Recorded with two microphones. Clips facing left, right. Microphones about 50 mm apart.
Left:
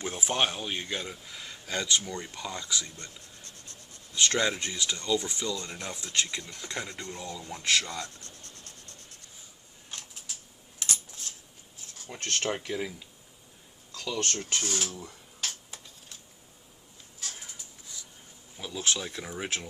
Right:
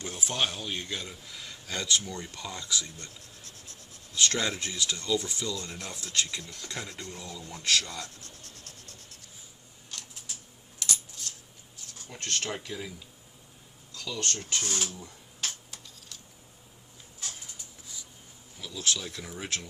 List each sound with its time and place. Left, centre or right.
0.0 s speech: left
7.6 s speech: left
7.9 s speech: centre
9.9 s a sound: left
11.9 s speech: left
13.9 s speech: left
18.6 s speech: left